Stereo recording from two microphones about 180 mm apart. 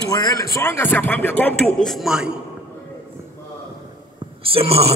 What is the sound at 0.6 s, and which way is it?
Speech, 10° left (ahead or behind).